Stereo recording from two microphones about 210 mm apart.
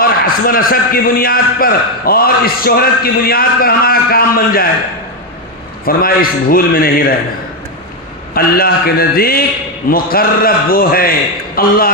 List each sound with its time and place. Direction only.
0.0 s a man's voice: 45° left (ahead or behind)
5.8 s a man's voice: 45° left (ahead or behind)
8.4 s a man's voice: 45° left (ahead or behind)